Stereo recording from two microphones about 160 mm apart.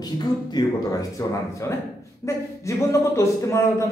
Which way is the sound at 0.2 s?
25° left (ahead or behind).